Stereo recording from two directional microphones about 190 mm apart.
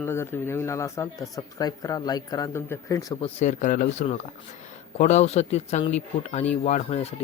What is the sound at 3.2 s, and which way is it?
Speech, 40° left (ahead or behind).